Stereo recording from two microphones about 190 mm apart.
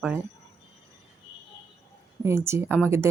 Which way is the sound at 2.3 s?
15° right (ahead or behind).